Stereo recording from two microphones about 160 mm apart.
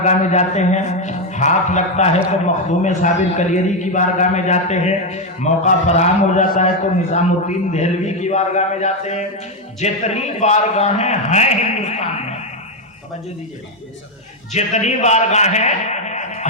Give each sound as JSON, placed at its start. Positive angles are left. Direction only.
{"t": 0.0, "sound": "a man's voice", "side_deg": 45}
{"t": 14.5, "sound": "a man's voice", "side_deg": 45}